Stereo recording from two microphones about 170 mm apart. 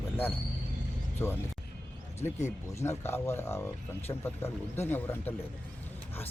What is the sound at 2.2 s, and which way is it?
Speech, 40° left (ahead or behind).